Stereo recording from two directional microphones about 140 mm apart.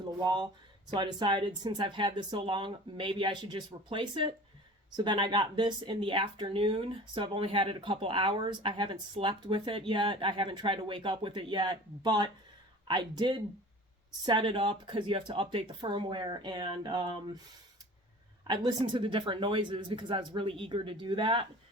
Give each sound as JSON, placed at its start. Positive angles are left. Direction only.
{"t": 0.2, "sound": "speech", "side_deg": -35}
{"t": 18.4, "sound": "speech", "side_deg": -30}